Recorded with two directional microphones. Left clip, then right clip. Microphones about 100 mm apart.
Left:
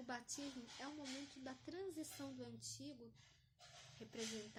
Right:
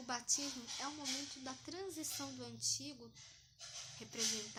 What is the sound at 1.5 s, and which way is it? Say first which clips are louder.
Speech: right 4 dB; 30° left (ahead or behind).